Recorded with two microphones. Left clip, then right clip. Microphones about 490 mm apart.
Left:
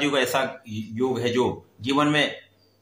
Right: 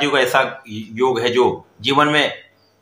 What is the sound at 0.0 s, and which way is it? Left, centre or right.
Speech, left.